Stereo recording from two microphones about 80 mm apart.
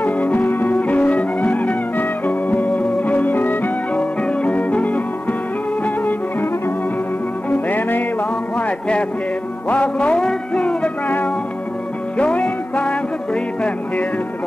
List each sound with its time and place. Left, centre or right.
0.0 s music: left
12.2 s music: centre